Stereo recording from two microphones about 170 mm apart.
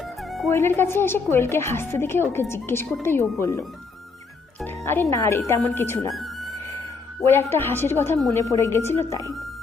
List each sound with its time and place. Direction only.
0.2 s music: centre (ahead or behind)
0.5 s a woman's voice: 15° left (ahead or behind)
4.6 s a woman's voice: 15° left (ahead or behind)
6.1 s music: centre (ahead or behind)
7.2 s a woman's voice: 15° left (ahead or behind)